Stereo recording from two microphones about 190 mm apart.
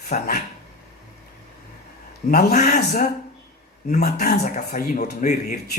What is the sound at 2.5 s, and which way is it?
A man's voice, 40° left (ahead or behind).